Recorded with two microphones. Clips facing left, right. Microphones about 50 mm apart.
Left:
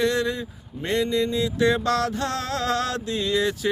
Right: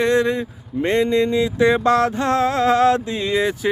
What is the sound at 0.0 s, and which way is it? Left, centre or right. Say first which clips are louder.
Speech: right 6 dB; right.